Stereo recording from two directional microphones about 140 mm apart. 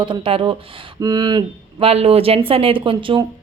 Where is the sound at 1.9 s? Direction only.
45° right (ahead or behind).